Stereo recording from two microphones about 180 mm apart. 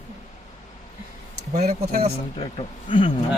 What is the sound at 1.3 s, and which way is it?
Speech, 65° right (ahead or behind).